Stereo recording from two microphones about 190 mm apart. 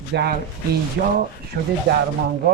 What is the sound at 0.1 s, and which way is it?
Speech, 60° right (ahead or behind).